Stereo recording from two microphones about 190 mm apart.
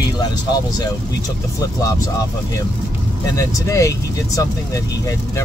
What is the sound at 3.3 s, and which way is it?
Speech, 15° left (ahead or behind).